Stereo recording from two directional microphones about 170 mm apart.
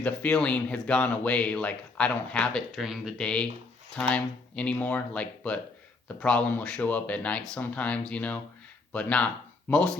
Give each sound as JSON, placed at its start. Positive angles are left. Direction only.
{"t": 0.0, "sound": "speech", "side_deg": 5}